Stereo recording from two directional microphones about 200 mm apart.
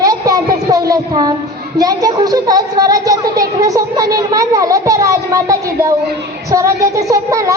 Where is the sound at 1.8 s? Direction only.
20° right (ahead or behind).